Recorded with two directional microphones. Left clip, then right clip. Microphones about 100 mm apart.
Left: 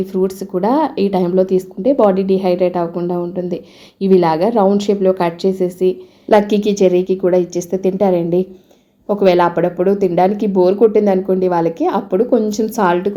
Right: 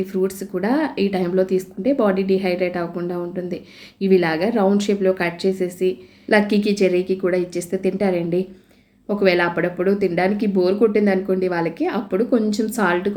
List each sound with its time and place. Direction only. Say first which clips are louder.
0.0 s speech: left 4 dB; 25° left (ahead or behind)